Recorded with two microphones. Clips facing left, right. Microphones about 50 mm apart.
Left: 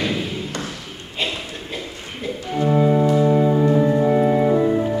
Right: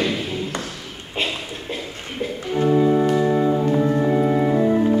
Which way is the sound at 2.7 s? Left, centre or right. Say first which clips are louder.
Even; centre.